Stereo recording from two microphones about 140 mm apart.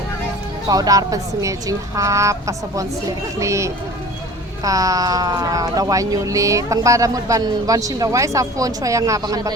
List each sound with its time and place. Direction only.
0.7 s speech: 25° right (ahead or behind)